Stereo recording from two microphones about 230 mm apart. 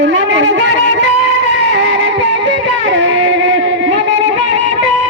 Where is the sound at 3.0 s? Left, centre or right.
Right.